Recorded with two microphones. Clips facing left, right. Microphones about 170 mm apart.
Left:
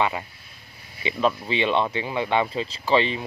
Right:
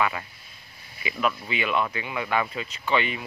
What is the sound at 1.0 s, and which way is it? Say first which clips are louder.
Speech: left 4 dB; 30° left (ahead or behind).